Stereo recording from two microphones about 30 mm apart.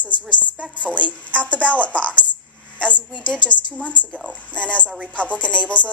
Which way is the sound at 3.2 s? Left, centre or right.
Left.